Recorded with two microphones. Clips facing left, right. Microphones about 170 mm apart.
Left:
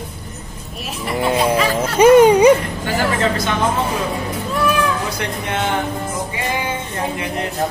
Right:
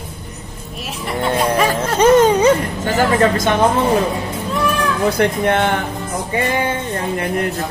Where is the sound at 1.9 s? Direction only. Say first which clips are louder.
Left 3 dB; 10° left (ahead or behind).